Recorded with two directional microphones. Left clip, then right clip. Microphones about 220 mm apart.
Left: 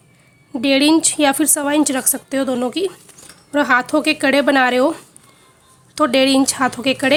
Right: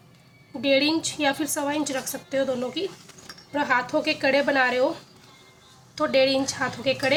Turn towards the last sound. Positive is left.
turn(degrees=55)  # may be behind; listen again after turning